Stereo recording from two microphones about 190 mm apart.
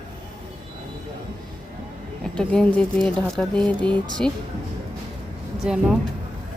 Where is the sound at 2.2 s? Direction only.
5° left (ahead or behind).